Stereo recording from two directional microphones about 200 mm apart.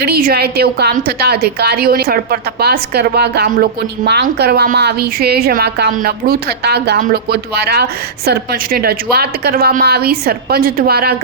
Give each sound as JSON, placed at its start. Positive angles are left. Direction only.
{"t": 0.0, "sound": "a woman's voice", "side_deg": -50}